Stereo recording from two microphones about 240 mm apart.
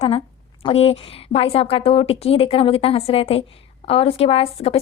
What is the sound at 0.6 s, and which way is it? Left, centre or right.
Speech, left.